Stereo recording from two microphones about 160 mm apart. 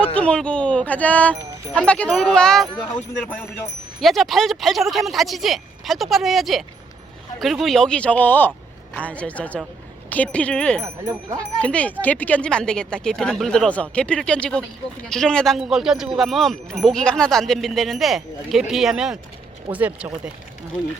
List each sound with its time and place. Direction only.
0.2 s speech: 5° left (ahead or behind)
4.0 s speech: centre (ahead or behind)
10.8 s speech: 20° right (ahead or behind)
11.6 s speech: 10° left (ahead or behind); by 20.1 s 10° right (ahead or behind)